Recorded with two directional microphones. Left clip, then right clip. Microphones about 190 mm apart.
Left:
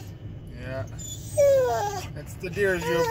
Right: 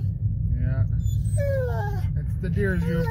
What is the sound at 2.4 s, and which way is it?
Speech, 20° left (ahead or behind).